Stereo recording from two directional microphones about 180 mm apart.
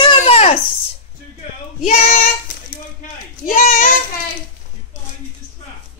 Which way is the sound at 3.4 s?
50° left (ahead or behind).